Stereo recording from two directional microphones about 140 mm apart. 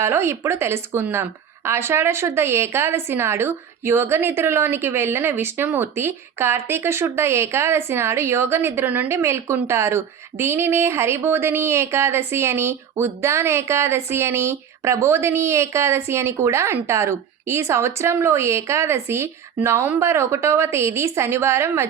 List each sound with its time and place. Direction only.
0.0 s speech: 15° right (ahead or behind)